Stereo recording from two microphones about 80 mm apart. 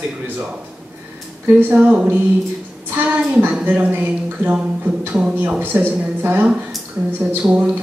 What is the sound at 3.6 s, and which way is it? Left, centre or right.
Speech, right.